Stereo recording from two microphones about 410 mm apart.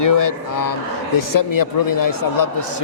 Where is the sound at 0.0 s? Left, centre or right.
Left.